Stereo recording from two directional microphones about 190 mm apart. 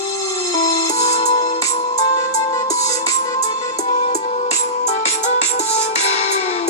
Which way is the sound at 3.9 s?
35° left (ahead or behind).